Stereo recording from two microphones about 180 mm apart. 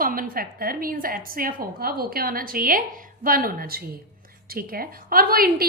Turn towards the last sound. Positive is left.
turn(degrees=-55)  # may be behind; listen again after turning